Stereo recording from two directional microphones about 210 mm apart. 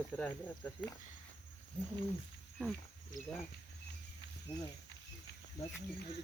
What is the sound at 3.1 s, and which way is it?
Speech, 40° left (ahead or behind).